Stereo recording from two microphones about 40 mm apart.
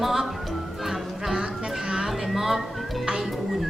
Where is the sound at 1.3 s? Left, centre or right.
Centre.